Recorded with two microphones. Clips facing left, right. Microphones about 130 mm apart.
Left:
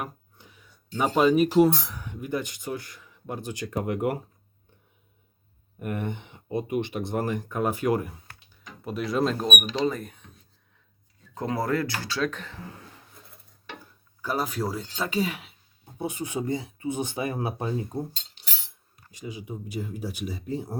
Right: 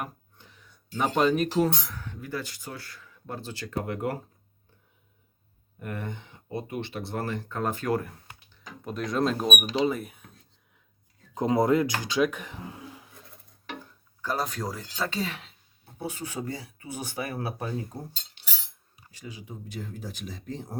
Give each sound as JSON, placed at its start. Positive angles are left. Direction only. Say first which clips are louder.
{"t": 0.3, "sound": "a sound", "louder": "left 1 dB", "side_deg": 10}
{"t": 0.9, "sound": "speech", "louder": "left 3 dB", "side_deg": 5}
{"t": 5.8, "sound": "speech", "louder": "left 5 dB", "side_deg": 20}
{"t": 8.8, "sound": "speech", "louder": "left 1 dB", "side_deg": 5}
{"t": 11.3, "sound": "speech", "louder": "right 4 dB", "side_deg": -20}
{"t": 14.2, "sound": "speech", "louder": "left 2 dB", "side_deg": 10}
{"t": 19.1, "sound": "speech", "louder": "left 5 dB", "side_deg": 15}